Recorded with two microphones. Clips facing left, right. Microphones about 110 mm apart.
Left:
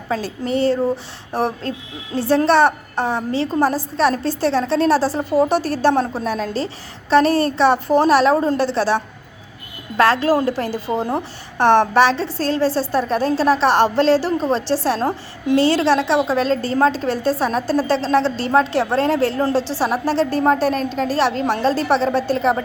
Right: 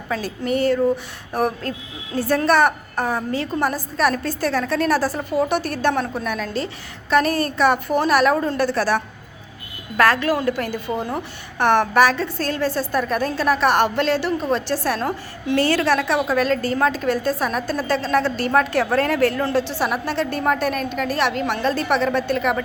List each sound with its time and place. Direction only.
0.1 s a woman's voice: 30° left (ahead or behind)
10.0 s a woman's voice: 30° left (ahead or behind)